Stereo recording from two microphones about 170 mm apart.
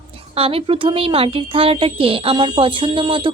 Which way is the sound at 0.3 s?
35° right (ahead or behind).